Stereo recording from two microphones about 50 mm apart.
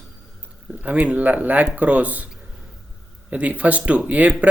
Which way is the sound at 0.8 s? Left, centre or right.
Right.